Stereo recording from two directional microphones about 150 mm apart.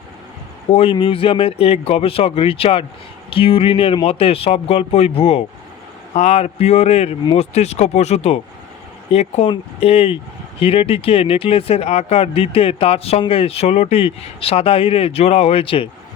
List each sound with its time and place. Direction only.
0.7 s speech: 40° left (ahead or behind)